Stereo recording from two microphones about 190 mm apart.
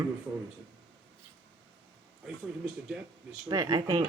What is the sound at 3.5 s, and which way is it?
Speech, 20° right (ahead or behind).